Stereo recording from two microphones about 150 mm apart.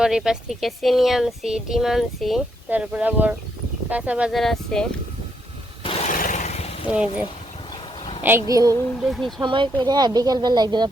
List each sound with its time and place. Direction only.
0.0 s speech: 5° right (ahead or behind)
5.8 s a sound: 40° left (ahead or behind)
6.1 s a sound: 60° left (ahead or behind)
6.8 s speech: 5° right (ahead or behind)
8.2 s speech: 15° right (ahead or behind)
9.0 s speech: centre (ahead or behind)
9.4 s speech: 30° right (ahead or behind)